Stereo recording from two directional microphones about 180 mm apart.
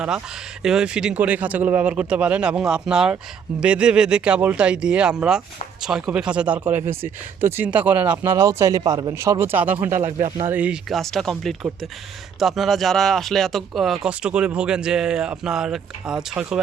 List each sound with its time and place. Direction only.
0.6 s speech: 5° right (ahead or behind)
10.1 s speech: 40° right (ahead or behind)
10.3 s speech: 10° right (ahead or behind)